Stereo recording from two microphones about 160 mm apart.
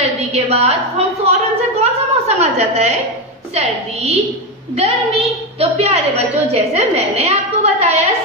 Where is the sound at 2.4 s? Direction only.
45° right (ahead or behind).